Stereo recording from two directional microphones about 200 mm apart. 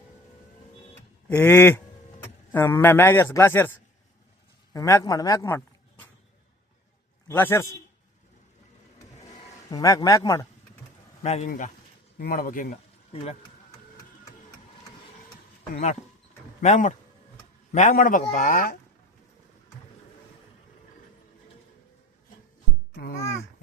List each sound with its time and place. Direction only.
1.3 s a man's voice: 10° left (ahead or behind)
4.7 s a man's voice: 15° left (ahead or behind)
7.3 s a man's voice: 10° left (ahead or behind)
9.6 s a man's voice: 20° left (ahead or behind)
11.2 s a man's voice: 35° left (ahead or behind)
13.1 s a man's voice: 30° left (ahead or behind)
15.7 s a man's voice: 35° left (ahead or behind)
23.1 s speech: 15° left (ahead or behind)